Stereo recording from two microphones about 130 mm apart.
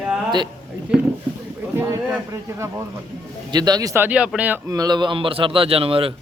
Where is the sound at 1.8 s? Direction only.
20° right (ahead or behind).